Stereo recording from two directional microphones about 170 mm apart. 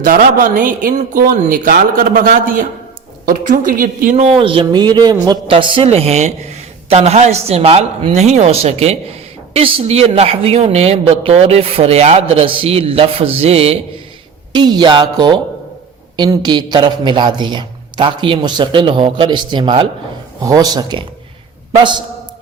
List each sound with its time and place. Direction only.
0.0 s a woman's voice: 55° right (ahead or behind); by 13.7 s 35° right (ahead or behind)
14.5 s a man's voice: 25° right (ahead or behind)